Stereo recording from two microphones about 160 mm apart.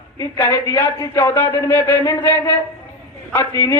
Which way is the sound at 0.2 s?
20° left (ahead or behind).